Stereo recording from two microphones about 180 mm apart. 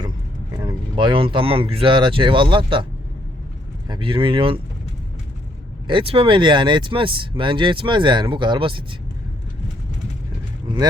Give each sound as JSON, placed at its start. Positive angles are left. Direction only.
{"t": 0.5, "sound": "speech", "side_deg": -25}
{"t": 3.8, "sound": "speech", "side_deg": -25}
{"t": 5.9, "sound": "speech", "side_deg": -30}